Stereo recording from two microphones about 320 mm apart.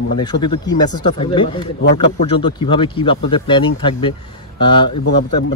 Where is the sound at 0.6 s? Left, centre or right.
Centre.